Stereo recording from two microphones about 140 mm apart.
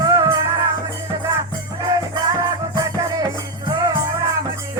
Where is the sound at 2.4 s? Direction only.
25° right (ahead or behind).